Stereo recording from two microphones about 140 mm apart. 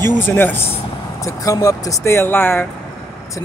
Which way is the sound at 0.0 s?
15° left (ahead or behind).